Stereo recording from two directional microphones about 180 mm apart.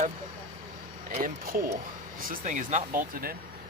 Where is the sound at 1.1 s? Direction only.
55° right (ahead or behind).